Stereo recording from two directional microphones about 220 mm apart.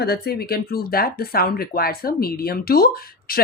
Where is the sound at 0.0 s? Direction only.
45° left (ahead or behind).